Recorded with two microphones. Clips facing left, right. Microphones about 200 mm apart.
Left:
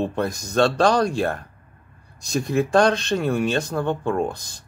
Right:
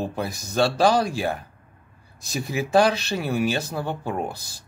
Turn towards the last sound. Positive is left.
turn(degrees=-5)  # may be behind; listen again after turning